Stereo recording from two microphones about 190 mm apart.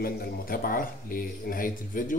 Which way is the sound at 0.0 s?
50° left (ahead or behind).